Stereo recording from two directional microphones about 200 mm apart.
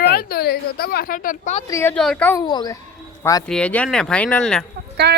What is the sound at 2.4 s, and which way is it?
Speech, 20° left (ahead or behind).